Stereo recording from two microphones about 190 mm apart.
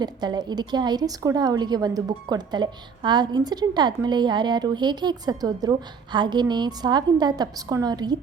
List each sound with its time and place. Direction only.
0.0 s a woman's voice: 20° right (ahead or behind)